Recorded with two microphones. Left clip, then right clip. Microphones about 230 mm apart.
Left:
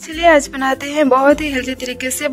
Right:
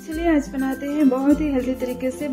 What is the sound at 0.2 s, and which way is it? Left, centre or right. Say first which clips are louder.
A woman's voice: left 10 dB; left.